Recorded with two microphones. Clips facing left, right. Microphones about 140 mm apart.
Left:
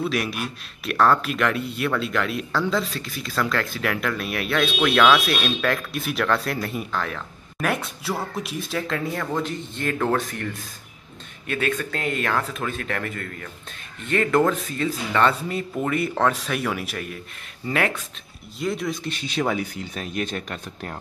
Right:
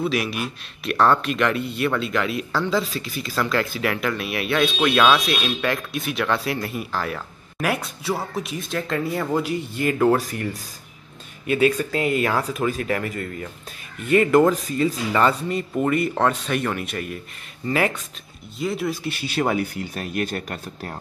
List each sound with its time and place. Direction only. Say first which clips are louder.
0.0 s speech: right 2 dB; centre (ahead or behind)
19.6 s speech: right 3 dB; 60° right (ahead or behind)
19.9 s speech: right 2 dB; 5° right (ahead or behind)
20.3 s speech: right 1 dB; 40° right (ahead or behind)